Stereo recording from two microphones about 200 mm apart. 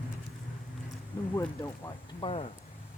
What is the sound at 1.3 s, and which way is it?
Speech, 15° left (ahead or behind).